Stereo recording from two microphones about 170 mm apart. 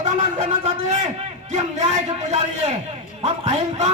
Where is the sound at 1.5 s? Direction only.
45° right (ahead or behind).